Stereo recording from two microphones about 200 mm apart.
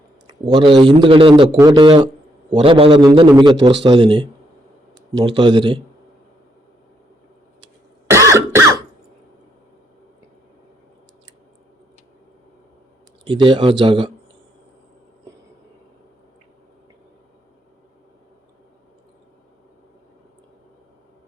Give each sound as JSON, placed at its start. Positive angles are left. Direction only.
{"t": 0.3, "sound": "a man's voice", "side_deg": -20}
{"t": 8.1, "sound": "cough", "side_deg": -15}
{"t": 13.2, "sound": "a man's voice", "side_deg": -25}